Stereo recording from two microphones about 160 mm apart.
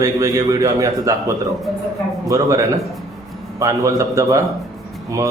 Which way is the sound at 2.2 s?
20° right (ahead or behind).